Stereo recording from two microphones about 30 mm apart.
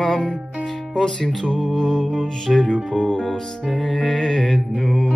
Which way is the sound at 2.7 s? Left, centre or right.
Left.